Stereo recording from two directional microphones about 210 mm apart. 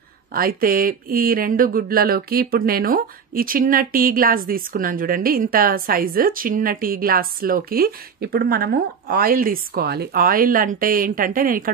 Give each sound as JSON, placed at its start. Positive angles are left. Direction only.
{"t": 0.3, "sound": "speech", "side_deg": -45}